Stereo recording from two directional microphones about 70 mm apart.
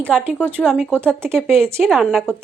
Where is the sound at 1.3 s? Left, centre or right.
Centre.